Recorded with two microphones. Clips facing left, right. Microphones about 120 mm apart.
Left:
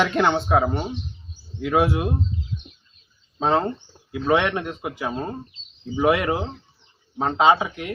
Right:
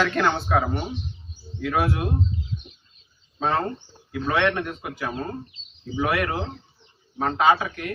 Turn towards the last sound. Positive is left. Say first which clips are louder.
# left 2 dB
turn(degrees=20)  # may be behind; listen again after turning